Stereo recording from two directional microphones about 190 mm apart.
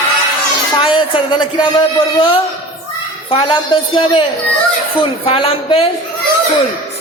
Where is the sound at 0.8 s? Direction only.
25° left (ahead or behind).